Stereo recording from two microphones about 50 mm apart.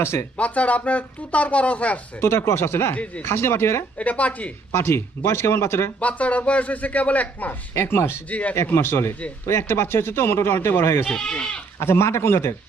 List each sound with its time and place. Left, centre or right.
0.0 s speech: left
0.3 s speech: left
2.2 s speech: left
2.9 s speech: left
3.2 s speech: left
3.9 s speech: left
4.7 s speech: left
6.0 s speech: left
7.7 s speech: left
8.3 s speech: left
8.5 s speech: left
11.0 s speech: centre
11.8 s speech: left